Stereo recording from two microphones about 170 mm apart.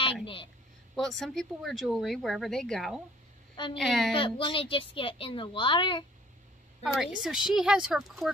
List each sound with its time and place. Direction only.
0.0 s a woman's voice: 30° left (ahead or behind)
0.9 s speech: centre (ahead or behind)
4.1 s speech: 30° left (ahead or behind)
6.8 s speech: centre (ahead or behind)